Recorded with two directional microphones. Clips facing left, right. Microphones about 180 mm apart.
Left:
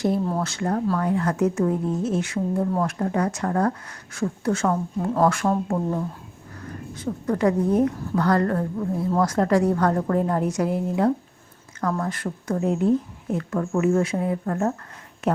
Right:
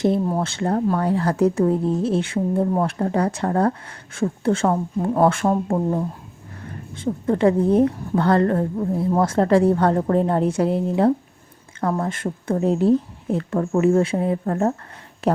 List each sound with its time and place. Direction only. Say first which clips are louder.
0.0 s a woman's voice: right 3 dB; 25° right (ahead or behind)